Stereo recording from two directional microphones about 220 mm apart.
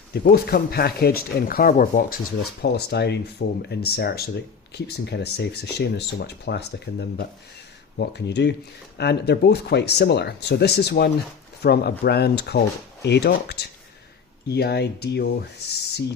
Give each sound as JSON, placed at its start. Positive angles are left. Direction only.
{"t": 0.1, "sound": "speech", "side_deg": 45}